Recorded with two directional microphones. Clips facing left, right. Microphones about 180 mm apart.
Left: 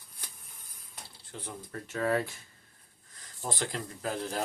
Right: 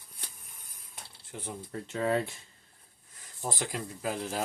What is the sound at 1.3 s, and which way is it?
Speech, 20° right (ahead or behind).